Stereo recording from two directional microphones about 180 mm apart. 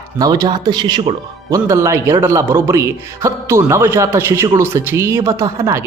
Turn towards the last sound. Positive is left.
turn(degrees=-15)  # may be behind; listen again after turning